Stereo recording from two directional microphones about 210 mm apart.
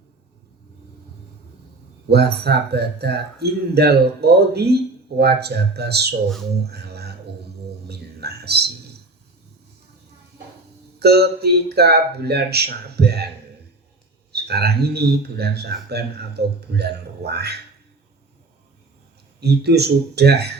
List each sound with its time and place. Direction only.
2.0 s a man's voice: 50° right (ahead or behind)
6.7 s music: 50° right (ahead or behind)
7.9 s a sound: 50° right (ahead or behind)
11.0 s a man's voice: 50° right (ahead or behind)
14.3 s a man's voice: 50° right (ahead or behind)
19.4 s a man's voice: 50° right (ahead or behind)